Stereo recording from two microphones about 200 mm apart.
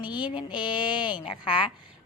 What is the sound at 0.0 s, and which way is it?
A woman's voice, 20° left (ahead or behind).